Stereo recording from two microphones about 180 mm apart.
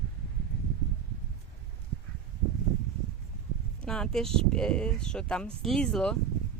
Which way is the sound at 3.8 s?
5° left (ahead or behind).